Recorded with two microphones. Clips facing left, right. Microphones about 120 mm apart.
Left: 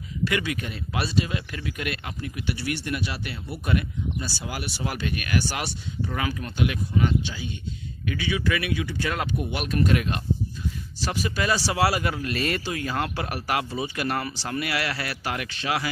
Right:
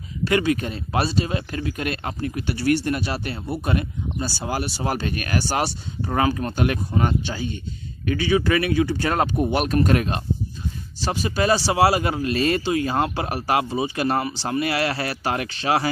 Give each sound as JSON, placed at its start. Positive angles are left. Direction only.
{"t": 0.2, "sound": "speech", "side_deg": -35}
{"t": 11.0, "sound": "speech", "side_deg": -30}